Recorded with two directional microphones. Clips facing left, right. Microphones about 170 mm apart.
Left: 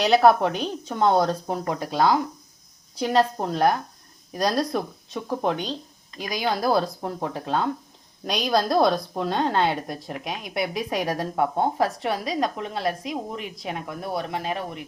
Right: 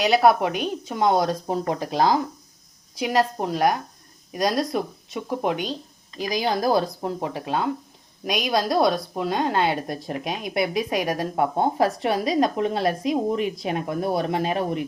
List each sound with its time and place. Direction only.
0.0 s a woman's voice: 5° right (ahead or behind); by 14.8 s 20° right (ahead or behind)